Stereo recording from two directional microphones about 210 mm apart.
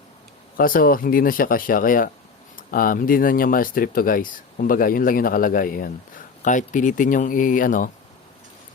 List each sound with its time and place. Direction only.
0.5 s speech: 40° left (ahead or behind)